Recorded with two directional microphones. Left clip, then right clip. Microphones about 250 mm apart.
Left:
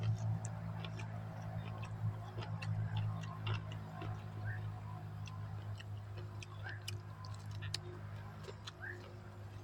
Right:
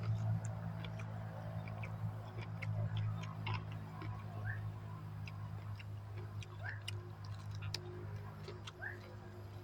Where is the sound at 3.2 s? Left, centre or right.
Centre.